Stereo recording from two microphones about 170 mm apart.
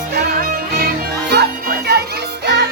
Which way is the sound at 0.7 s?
70° right (ahead or behind).